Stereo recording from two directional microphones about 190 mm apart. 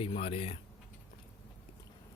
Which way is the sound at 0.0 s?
30° left (ahead or behind).